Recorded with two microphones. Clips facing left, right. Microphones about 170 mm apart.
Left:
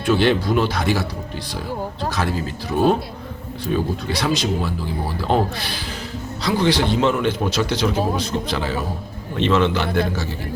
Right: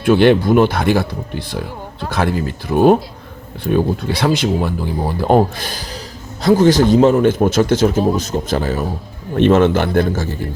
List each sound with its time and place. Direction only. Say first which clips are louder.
0.0 s a man's voice: right 6 dB; 55° right (ahead or behind)